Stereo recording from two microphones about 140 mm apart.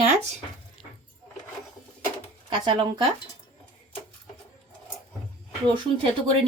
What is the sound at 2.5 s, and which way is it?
Speech, 35° right (ahead or behind).